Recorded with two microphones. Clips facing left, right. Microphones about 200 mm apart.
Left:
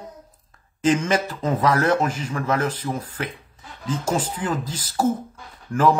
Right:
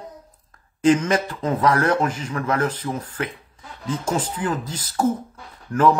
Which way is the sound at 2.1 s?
10° left (ahead or behind).